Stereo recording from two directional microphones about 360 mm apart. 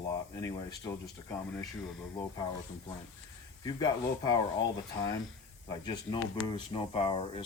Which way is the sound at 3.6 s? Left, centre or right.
Centre.